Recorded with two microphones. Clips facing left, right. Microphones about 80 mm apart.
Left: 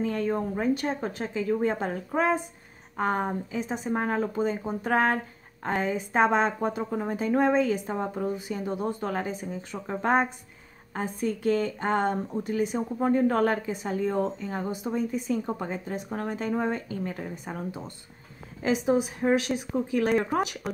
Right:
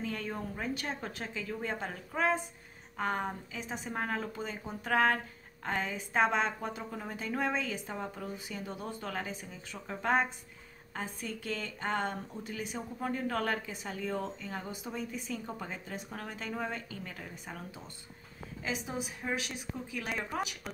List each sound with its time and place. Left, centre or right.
0.0 s speech: left
12.3 s speech: left
12.7 s speech: left
14.7 s speech: left
18.7 s a woman's voice: left
19.7 s speech: left
20.6 s speech: centre